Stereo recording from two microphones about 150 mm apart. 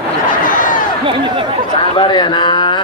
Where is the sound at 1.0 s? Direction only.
35° right (ahead or behind).